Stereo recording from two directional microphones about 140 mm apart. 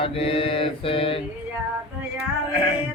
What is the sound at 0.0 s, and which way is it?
Mantra, 40° left (ahead or behind).